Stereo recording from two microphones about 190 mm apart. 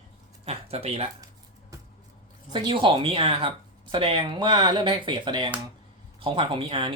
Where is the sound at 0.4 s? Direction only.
30° right (ahead or behind).